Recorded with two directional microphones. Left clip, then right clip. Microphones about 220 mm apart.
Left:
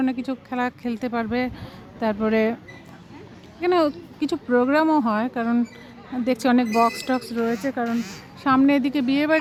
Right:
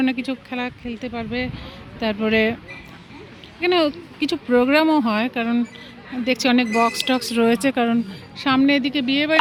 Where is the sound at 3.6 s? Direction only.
Centre (ahead or behind).